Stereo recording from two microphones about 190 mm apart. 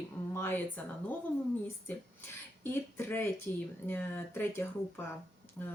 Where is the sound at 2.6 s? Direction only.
10° left (ahead or behind).